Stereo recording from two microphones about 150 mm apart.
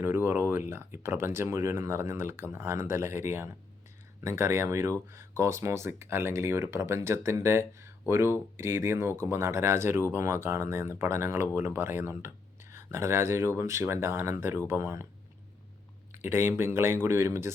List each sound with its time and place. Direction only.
0.0 s speech: 15° right (ahead or behind)
16.2 s speech: 15° right (ahead or behind)